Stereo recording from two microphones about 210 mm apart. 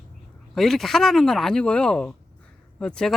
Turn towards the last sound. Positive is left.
turn(degrees=5)  # may be behind; listen again after turning